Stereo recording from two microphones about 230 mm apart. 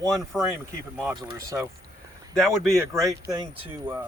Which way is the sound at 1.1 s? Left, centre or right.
Centre.